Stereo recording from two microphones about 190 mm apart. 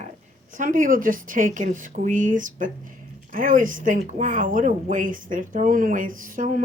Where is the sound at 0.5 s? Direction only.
45° right (ahead or behind).